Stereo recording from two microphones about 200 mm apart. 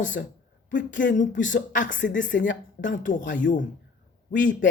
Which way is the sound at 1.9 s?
65° left (ahead or behind).